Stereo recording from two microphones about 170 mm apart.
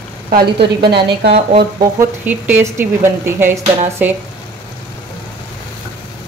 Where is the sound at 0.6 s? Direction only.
75° right (ahead or behind).